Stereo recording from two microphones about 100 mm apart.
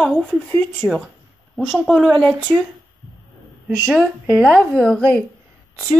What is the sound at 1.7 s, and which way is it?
Speech, 5° right (ahead or behind).